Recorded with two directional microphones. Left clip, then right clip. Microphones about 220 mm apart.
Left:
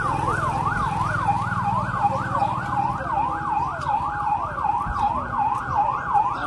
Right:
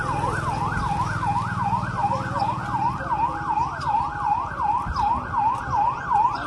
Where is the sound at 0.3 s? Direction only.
Centre (ahead or behind).